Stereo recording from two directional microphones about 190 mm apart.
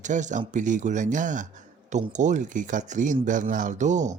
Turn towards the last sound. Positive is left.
turn(degrees=-40)  # may be behind; listen again after turning